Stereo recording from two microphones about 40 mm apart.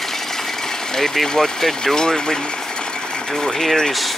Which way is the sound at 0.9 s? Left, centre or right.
Centre.